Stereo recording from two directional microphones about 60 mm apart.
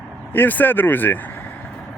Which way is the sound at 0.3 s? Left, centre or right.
Left.